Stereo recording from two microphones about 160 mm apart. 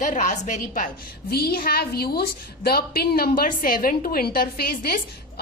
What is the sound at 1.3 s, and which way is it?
A woman's voice, 75° left (ahead or behind).